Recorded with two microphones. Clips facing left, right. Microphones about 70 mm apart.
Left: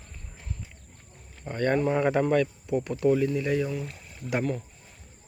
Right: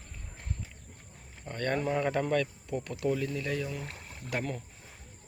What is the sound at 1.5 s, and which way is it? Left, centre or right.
Speech, centre.